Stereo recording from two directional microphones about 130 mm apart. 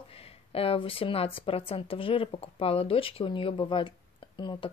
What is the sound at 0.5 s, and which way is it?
Speech, 45° left (ahead or behind).